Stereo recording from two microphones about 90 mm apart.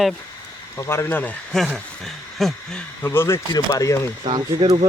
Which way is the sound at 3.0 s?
25° left (ahead or behind).